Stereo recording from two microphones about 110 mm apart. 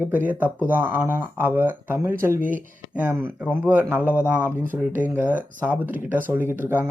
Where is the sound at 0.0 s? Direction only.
15° right (ahead or behind).